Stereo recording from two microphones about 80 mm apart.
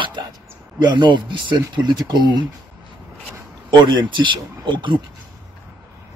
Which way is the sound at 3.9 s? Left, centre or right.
Right.